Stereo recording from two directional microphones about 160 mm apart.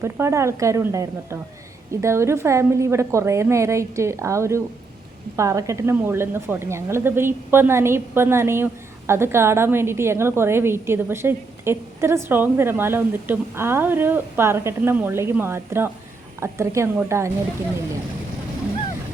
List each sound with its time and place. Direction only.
0.0 s a woman's voice: 15° right (ahead or behind)